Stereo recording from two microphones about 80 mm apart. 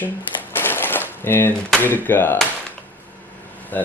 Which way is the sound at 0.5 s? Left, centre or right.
Left.